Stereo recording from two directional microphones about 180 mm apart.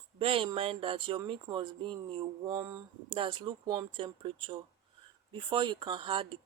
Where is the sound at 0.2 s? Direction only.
30° right (ahead or behind).